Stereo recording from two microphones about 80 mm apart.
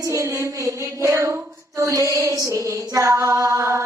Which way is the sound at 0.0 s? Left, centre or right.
Right.